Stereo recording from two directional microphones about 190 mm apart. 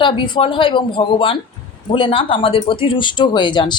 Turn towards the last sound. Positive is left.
turn(degrees=25)  # may be behind; listen again after turning